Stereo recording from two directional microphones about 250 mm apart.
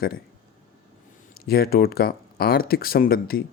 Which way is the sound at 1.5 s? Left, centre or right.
Left.